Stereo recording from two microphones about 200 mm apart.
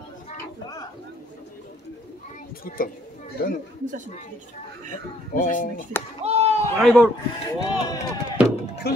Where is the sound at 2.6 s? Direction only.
45° left (ahead or behind).